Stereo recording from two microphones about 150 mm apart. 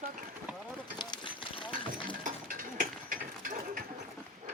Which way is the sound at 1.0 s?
30° left (ahead or behind).